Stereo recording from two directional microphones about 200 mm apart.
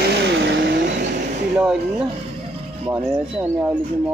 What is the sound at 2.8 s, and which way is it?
Speech, 10° right (ahead or behind).